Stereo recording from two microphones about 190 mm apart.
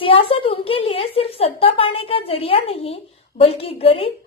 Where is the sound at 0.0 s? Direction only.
30° left (ahead or behind).